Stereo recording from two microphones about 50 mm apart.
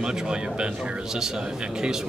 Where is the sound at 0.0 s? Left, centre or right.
Centre.